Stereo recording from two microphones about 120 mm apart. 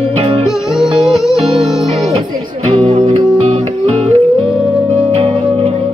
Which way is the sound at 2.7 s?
50° right (ahead or behind).